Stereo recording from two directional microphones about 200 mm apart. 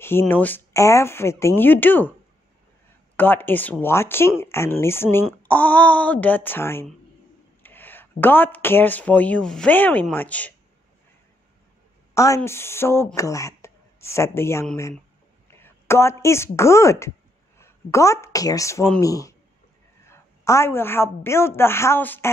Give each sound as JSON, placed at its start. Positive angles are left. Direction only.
{"t": 0.0, "sound": "speech", "side_deg": 10}
{"t": 3.2, "sound": "speech", "side_deg": 10}
{"t": 12.1, "sound": "a sound", "side_deg": 15}
{"t": 12.4, "sound": "a woman's voice", "side_deg": 10}